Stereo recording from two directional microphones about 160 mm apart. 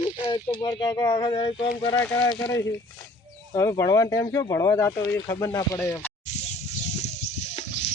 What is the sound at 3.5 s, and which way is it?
Speech, 20° left (ahead or behind).